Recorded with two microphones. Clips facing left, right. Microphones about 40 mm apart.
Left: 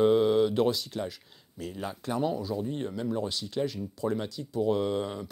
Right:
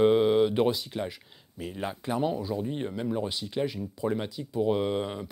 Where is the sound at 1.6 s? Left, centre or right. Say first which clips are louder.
Right 2 dB; right.